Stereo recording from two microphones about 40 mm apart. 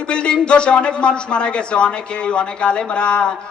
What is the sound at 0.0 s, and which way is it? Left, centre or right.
A man's voice, left.